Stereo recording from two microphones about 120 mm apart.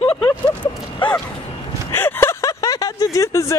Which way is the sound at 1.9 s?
20° left (ahead or behind).